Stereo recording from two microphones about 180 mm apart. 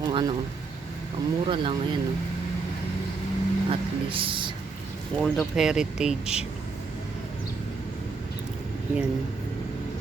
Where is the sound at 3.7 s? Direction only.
30° right (ahead or behind).